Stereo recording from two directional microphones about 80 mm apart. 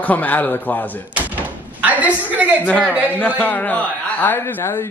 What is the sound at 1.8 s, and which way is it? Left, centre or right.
Speech, centre.